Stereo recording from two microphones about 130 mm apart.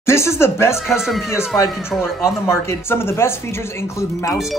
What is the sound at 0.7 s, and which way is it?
Speech, 5° right (ahead or behind).